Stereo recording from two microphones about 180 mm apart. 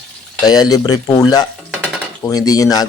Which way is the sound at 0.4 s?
20° left (ahead or behind).